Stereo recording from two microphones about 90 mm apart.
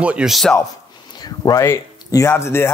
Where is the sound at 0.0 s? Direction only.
15° right (ahead or behind).